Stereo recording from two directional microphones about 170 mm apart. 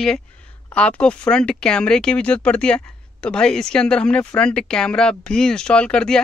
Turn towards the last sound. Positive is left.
turn(degrees=5)  # may be behind; listen again after turning